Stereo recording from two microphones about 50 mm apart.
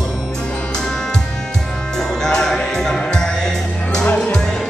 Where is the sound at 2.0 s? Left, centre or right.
Centre.